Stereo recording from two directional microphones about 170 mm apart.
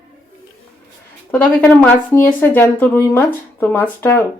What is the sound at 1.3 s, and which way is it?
Speech, 10° left (ahead or behind).